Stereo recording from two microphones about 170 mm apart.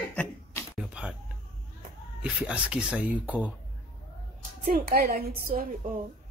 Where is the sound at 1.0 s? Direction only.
5° right (ahead or behind).